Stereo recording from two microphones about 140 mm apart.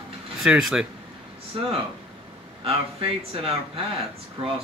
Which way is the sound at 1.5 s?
40° right (ahead or behind).